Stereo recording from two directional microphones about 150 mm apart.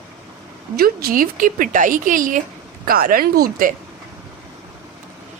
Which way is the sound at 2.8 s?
75° right (ahead or behind).